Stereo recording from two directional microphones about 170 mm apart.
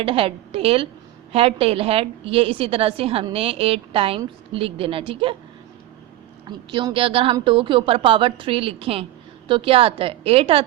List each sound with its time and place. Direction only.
0.0 s a woman's voice: 35° right (ahead or behind)
6.7 s a woman's voice: 30° right (ahead or behind)